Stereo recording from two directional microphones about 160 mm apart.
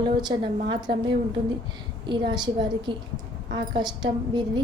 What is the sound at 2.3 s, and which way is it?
A woman's voice, 25° right (ahead or behind).